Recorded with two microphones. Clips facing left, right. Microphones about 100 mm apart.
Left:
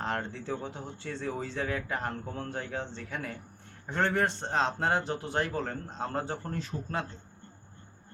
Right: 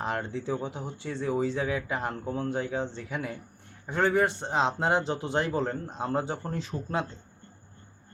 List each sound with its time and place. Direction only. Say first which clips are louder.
0.0 s speech: right 3 dB; 15° right (ahead or behind)